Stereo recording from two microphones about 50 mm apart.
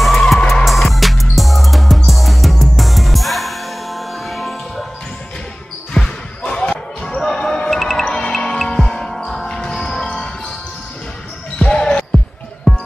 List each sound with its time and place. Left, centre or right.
0.0 s music: centre
5.9 s basketball bounce: centre
7.7 s music: centre
8.1 s music: centre
11.5 s basketball bounce: centre
12.7 s music: centre